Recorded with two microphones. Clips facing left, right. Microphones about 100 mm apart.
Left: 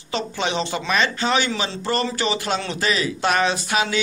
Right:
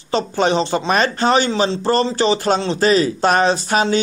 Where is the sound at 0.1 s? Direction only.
40° right (ahead or behind).